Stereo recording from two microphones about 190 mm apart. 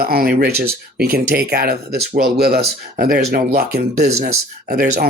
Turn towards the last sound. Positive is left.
turn(degrees=-50)  # may be behind; listen again after turning